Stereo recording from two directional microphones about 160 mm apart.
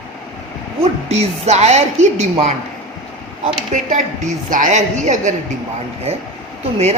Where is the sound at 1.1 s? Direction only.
40° right (ahead or behind).